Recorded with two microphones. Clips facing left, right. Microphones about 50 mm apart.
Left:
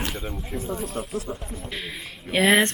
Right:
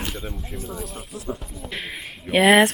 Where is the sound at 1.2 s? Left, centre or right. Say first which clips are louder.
Right 1 dB; centre.